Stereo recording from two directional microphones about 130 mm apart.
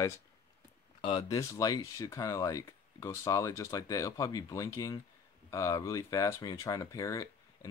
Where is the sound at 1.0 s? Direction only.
40° left (ahead or behind).